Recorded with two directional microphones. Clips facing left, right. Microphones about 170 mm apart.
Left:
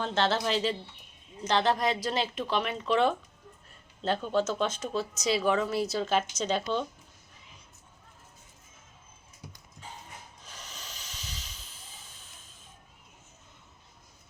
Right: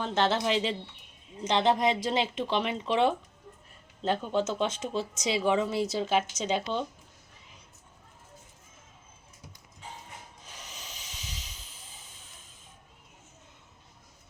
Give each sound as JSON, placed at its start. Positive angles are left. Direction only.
{"t": 0.0, "sound": "speech", "side_deg": -15}
{"t": 10.5, "sound": "hiss", "side_deg": -15}